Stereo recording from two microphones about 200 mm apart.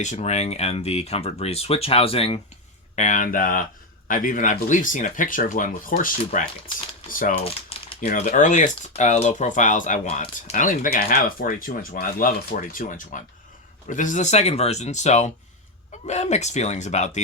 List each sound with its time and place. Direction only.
0.0 s speech: 35° left (ahead or behind)